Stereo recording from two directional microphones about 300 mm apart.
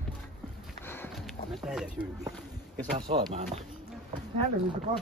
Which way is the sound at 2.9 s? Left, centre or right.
Centre.